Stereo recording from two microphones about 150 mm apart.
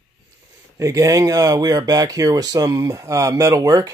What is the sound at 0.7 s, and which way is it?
Speech, 20° right (ahead or behind).